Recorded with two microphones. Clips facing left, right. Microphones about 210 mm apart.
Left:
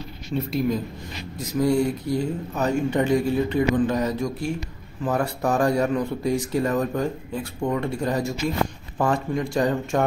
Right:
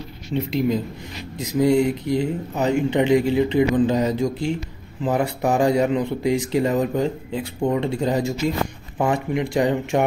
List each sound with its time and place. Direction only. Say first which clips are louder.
0.3 s speech: right 2 dB; 25° right (ahead or behind)